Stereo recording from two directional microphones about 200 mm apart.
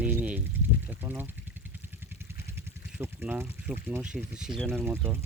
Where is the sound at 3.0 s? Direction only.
10° right (ahead or behind).